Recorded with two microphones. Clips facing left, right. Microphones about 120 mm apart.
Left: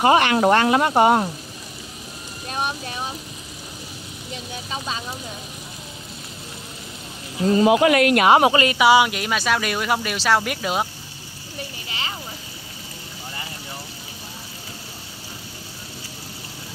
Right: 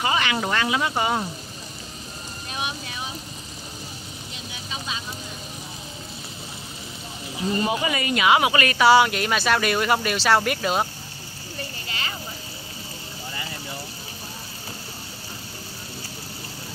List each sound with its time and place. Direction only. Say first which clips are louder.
0.0 s speech: left 8 dB; 55° left (ahead or behind)
7.4 s speech: left 9 dB; 90° left; by 8.3 s 65° left (ahead or behind)
8.3 s speech: left 2 dB; 40° left (ahead or behind)
8.7 s speech: left 1 dB; 10° left (ahead or behind)